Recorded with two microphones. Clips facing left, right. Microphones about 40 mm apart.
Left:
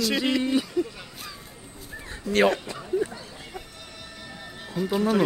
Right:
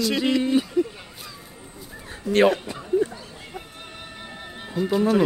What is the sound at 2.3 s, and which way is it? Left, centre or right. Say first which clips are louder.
Speech: right 3 dB; centre.